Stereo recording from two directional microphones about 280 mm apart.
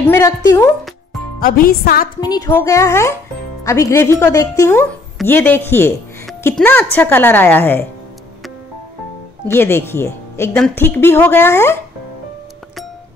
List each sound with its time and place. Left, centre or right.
0.1 s a woman's voice: centre
1.4 s speech: left
2.1 s a woman's voice: centre
9.5 s a woman's voice: centre